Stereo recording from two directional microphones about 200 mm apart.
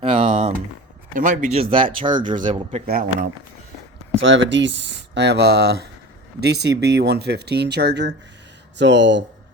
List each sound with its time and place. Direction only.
0.0 s a sound: 30° right (ahead or behind)
1.1 s a man's voice: 40° right (ahead or behind)
1.7 s speech: 25° right (ahead or behind)
2.8 s a man's voice: 40° right (ahead or behind)
4.2 s speech: 70° right (ahead or behind)